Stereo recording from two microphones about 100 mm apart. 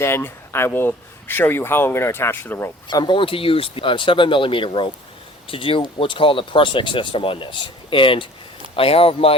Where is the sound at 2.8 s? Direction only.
50° left (ahead or behind).